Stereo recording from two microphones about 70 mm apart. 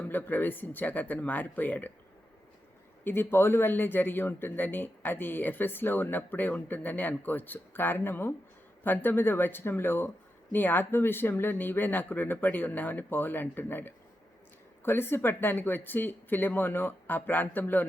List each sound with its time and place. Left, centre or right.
0.0 s speech: left
3.0 s speech: left